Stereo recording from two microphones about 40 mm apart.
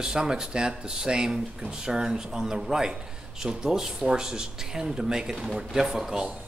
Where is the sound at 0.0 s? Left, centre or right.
Centre.